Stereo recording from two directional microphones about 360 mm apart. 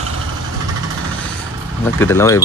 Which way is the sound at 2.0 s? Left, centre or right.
Centre.